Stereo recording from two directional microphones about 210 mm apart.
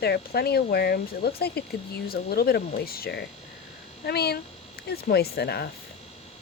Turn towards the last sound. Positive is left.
turn(degrees=50)  # may be behind; listen again after turning